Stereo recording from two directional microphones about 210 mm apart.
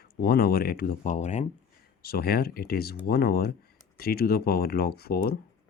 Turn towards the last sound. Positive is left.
turn(degrees=50)  # may be behind; listen again after turning